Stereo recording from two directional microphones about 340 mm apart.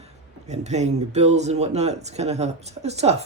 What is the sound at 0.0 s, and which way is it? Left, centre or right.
A man's voice, centre.